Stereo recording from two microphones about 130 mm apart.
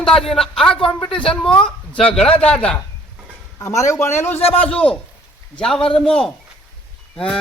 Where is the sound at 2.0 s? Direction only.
50° left (ahead or behind).